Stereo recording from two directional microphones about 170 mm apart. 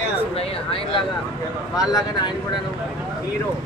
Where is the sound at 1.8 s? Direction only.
20° left (ahead or behind).